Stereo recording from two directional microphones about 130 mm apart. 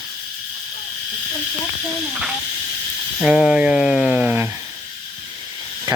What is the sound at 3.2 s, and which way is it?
Speech, 5° right (ahead or behind).